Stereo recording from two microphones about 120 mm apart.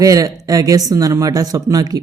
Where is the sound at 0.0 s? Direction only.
30° right (ahead or behind).